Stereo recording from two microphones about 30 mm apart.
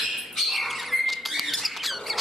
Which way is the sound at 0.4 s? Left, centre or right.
Centre.